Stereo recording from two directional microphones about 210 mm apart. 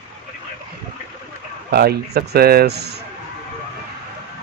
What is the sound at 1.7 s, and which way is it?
Speech, 50° right (ahead or behind).